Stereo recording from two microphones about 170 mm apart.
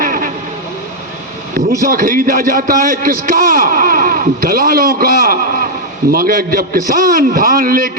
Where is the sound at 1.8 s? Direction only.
60° right (ahead or behind).